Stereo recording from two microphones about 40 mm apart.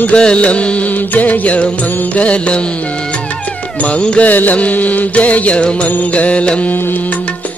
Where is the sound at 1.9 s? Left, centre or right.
Left.